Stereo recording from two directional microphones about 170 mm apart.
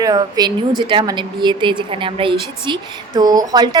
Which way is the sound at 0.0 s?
25° right (ahead or behind).